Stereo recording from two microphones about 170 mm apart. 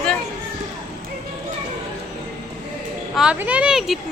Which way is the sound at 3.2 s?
5° right (ahead or behind).